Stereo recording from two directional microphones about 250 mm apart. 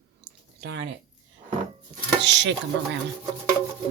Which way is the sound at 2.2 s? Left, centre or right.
Right.